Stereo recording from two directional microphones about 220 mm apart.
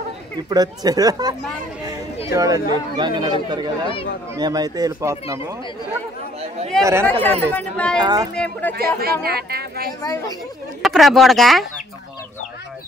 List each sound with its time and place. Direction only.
0.5 s speech: 15° right (ahead or behind)
6.8 s speech: 10° right (ahead or behind)
7.1 s speech: 5° left (ahead or behind)
8.0 s speech: 20° right (ahead or behind)
8.4 s speech: 5° left (ahead or behind)
8.7 s speech: 45° right (ahead or behind)
9.2 s chatter: 45° right (ahead or behind)
10.0 s speech: 15° left (ahead or behind)
10.8 s speech: centre (ahead or behind)